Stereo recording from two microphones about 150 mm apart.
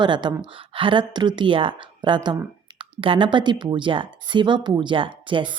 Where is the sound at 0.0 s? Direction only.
30° right (ahead or behind).